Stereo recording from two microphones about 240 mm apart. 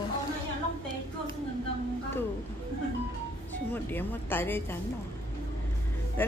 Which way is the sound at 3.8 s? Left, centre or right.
Centre.